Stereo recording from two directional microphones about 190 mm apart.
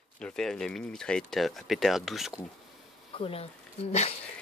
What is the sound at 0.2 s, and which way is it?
Speech, 5° left (ahead or behind).